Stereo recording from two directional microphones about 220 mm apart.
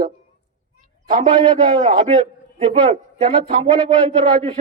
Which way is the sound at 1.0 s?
35° right (ahead or behind).